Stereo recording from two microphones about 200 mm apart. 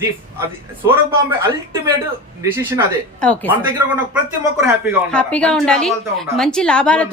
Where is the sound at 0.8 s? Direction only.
10° right (ahead or behind).